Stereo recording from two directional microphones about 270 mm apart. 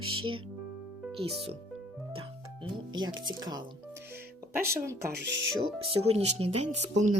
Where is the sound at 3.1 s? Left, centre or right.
Centre.